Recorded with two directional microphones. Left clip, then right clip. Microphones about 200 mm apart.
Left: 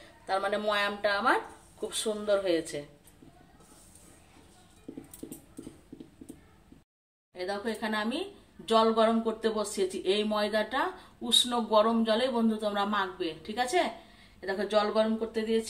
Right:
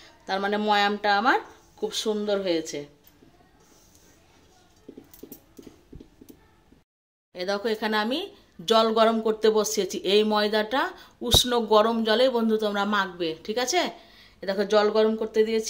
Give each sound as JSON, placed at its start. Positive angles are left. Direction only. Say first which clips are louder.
{"t": 0.3, "sound": "speech", "louder": "right 5 dB", "side_deg": -40}
{"t": 7.3, "sound": "a woman's voice", "louder": "right 7 dB", "side_deg": -55}